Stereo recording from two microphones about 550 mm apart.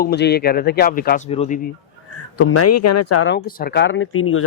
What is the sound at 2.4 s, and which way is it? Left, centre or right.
Speech, left.